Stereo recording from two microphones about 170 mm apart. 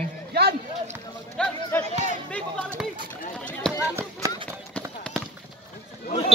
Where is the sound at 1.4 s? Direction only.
5° left (ahead or behind).